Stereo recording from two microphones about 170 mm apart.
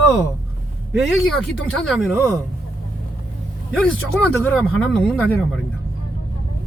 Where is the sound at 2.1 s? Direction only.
15° right (ahead or behind).